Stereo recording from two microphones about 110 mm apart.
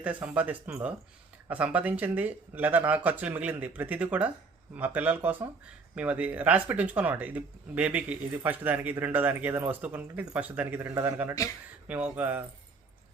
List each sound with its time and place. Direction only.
0.0 s speech: 10° right (ahead or behind)